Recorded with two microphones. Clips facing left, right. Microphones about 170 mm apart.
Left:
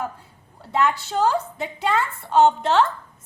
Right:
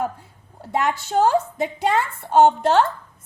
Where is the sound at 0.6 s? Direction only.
45° right (ahead or behind).